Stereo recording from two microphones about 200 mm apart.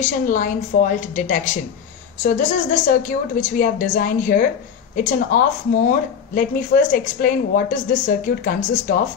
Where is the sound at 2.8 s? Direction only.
45° left (ahead or behind).